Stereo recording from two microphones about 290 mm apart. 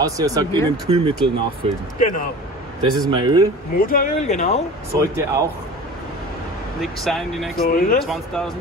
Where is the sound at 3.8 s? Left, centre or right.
Left.